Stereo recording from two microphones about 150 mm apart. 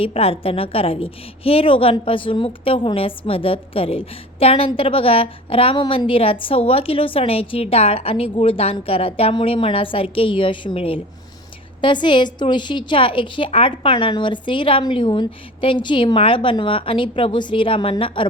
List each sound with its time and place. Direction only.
0.0 s a woman's voice: 40° left (ahead or behind)